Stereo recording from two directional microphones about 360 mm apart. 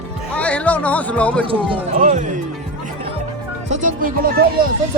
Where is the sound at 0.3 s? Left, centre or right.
Centre.